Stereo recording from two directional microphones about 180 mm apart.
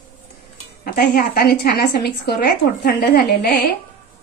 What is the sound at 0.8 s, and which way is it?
A woman's voice, 55° left (ahead or behind).